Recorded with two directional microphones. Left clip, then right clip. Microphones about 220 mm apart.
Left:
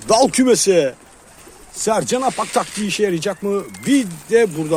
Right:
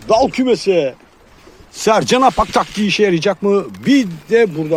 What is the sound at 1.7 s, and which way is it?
Speech, 35° right (ahead or behind).